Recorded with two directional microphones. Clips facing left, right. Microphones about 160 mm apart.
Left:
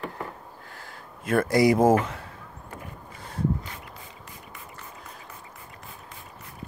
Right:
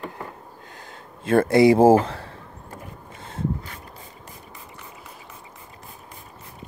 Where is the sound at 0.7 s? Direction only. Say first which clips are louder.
Right 2 dB; 25° right (ahead or behind).